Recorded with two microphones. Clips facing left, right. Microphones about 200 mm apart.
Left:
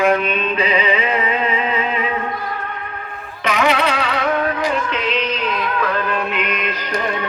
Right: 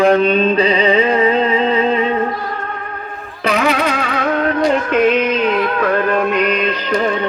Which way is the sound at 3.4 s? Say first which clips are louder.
Right 2 dB; 40° right (ahead or behind).